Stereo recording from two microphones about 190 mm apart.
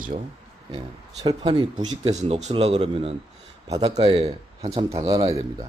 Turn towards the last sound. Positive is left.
turn(degrees=-20)  # may be behind; listen again after turning